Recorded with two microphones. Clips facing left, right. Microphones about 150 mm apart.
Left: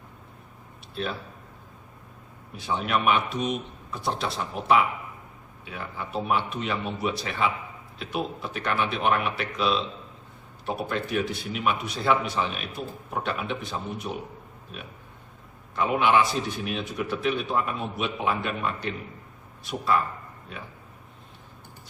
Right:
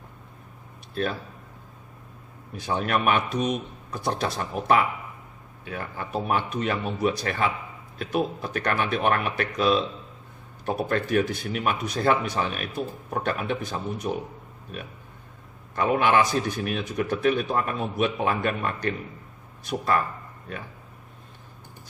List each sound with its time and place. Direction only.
2.6 s a man's voice: 45° right (ahead or behind)
10.8 s a man's voice: 45° right (ahead or behind)
15.7 s a man's voice: 50° right (ahead or behind)